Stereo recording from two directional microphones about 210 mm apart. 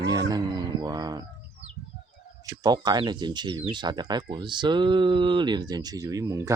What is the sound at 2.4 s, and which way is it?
Speech, 15° right (ahead or behind).